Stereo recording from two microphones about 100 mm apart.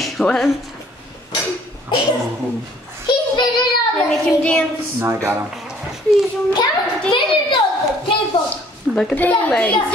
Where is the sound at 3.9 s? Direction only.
10° left (ahead or behind).